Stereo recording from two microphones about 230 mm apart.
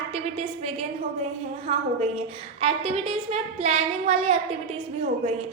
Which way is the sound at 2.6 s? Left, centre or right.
Right.